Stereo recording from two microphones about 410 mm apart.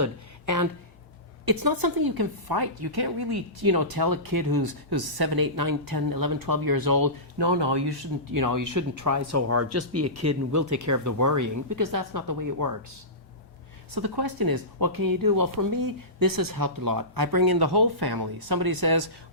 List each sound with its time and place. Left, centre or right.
0.0 s speech: right
1.5 s speech: right
8.3 s speech: right
13.9 s speech: right